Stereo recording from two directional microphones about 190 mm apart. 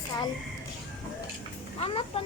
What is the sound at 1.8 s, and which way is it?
Speech, 30° left (ahead or behind).